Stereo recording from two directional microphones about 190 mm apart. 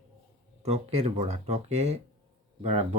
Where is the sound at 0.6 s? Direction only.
35° right (ahead or behind).